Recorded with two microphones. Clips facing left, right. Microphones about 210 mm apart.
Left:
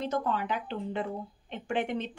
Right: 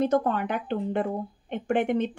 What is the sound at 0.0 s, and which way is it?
Speech, 55° right (ahead or behind).